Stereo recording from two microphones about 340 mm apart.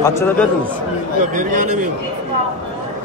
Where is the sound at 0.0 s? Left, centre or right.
Centre.